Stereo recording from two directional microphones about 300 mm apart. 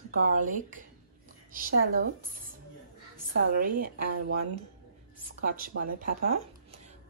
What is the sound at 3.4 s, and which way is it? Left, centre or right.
Speech, right.